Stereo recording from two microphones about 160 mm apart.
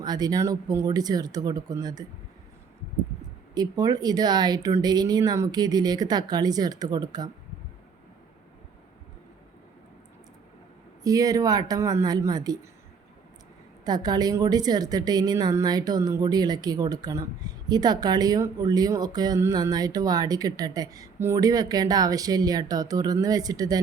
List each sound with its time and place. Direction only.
0.0 s a woman's voice: 25° right (ahead or behind)
3.5 s a woman's voice: 25° right (ahead or behind)
11.0 s a woman's voice: 20° right (ahead or behind)
13.8 s a woman's voice: 25° right (ahead or behind)